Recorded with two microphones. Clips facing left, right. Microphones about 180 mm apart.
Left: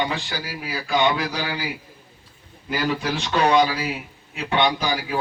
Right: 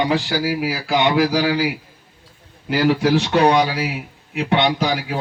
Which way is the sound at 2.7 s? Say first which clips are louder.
Right 8 dB; 70° right (ahead or behind).